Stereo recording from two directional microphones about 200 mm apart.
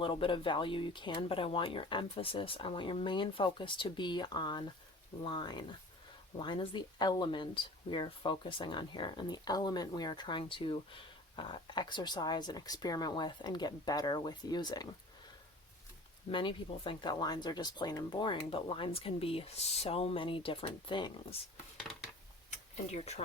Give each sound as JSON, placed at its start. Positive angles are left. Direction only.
{"t": 0.0, "sound": "speech", "side_deg": 25}
{"t": 16.3, "sound": "speech", "side_deg": 25}
{"t": 22.4, "sound": "a sound", "side_deg": 35}